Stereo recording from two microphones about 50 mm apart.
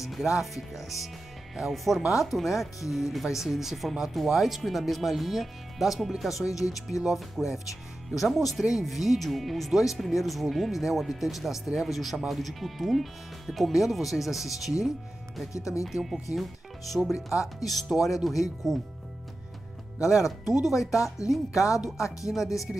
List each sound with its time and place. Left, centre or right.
0.0 s speech: centre
15.5 s speech: left
15.8 s speech: centre
17.1 s speech: left
17.9 s speech: centre
20.2 s speech: centre
20.9 s speech: left
22.7 s speech: centre